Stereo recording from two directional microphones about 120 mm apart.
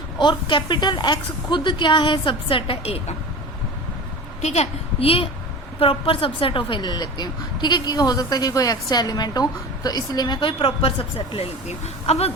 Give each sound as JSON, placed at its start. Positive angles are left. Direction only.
{"t": 0.2, "sound": "a woman's voice", "side_deg": 40}
{"t": 4.4, "sound": "a woman's voice", "side_deg": 65}
{"t": 12.0, "sound": "a woman's voice", "side_deg": 60}